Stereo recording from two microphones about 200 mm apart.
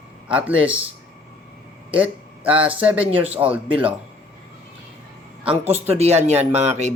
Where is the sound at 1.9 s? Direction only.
5° right (ahead or behind).